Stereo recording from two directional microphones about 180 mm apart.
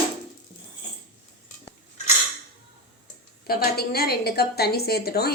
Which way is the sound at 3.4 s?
60° left (ahead or behind).